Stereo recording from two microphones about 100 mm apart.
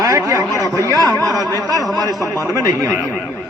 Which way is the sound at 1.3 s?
35° right (ahead or behind).